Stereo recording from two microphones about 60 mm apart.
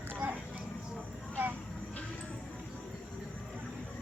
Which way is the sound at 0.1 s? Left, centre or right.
Right.